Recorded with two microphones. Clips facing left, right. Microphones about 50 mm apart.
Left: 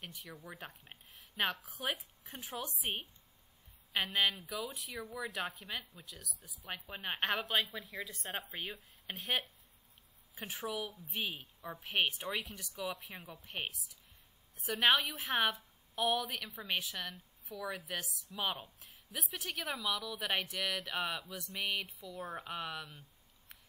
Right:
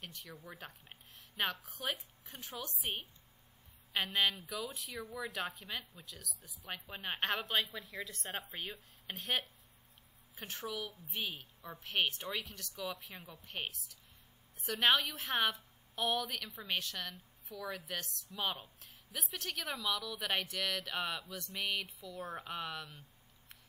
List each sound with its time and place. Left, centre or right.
0.0 s a woman's voice: centre